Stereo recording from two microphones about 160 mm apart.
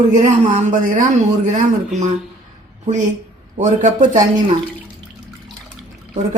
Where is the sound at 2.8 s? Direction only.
50° right (ahead or behind).